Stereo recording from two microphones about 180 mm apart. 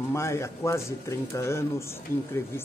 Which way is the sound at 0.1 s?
15° left (ahead or behind).